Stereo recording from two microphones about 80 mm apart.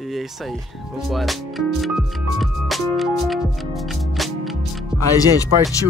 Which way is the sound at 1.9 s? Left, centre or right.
Centre.